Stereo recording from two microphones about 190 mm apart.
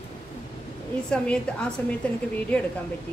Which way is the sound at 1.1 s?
5° left (ahead or behind).